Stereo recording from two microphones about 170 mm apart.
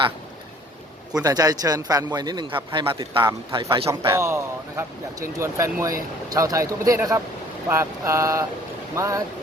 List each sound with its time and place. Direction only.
1.1 s a man's voice: 20° right (ahead or behind)
3.8 s speech: 15° right (ahead or behind)